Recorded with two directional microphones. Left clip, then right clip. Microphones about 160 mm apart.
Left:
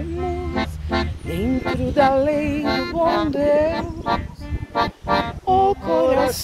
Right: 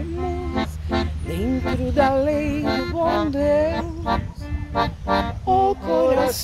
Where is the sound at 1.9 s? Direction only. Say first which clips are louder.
Left 2 dB; 40° left (ahead or behind).